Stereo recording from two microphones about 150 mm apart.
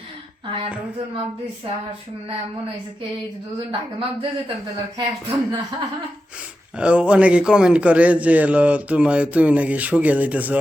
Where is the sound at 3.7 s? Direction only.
35° right (ahead or behind).